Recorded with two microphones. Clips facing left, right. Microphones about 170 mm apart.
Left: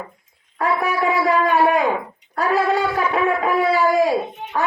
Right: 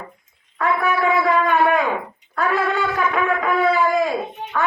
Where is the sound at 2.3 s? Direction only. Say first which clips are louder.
Left 2 dB; 35° left (ahead or behind).